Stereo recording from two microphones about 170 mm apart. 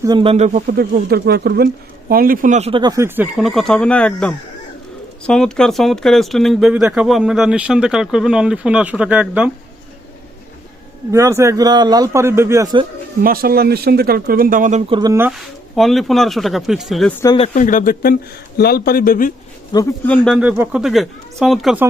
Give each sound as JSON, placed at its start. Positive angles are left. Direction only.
{"t": 0.0, "sound": "speech", "side_deg": -25}
{"t": 0.8, "sound": "speech", "side_deg": -65}
{"t": 2.8, "sound": "speech", "side_deg": -20}
{"t": 3.3, "sound": "speech", "side_deg": 0}
{"t": 11.1, "sound": "speech", "side_deg": -15}
{"t": 13.2, "sound": "speech", "side_deg": -60}
{"t": 15.3, "sound": "speech", "side_deg": 0}
{"t": 17.5, "sound": "speech", "side_deg": 50}
{"t": 19.7, "sound": "a man's voice", "side_deg": 25}
{"t": 20.1, "sound": "speech", "side_deg": 5}
{"t": 20.4, "sound": "speech", "side_deg": -5}